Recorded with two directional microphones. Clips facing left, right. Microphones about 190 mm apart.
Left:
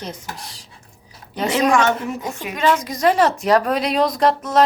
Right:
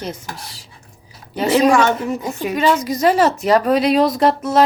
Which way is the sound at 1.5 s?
35° right (ahead or behind).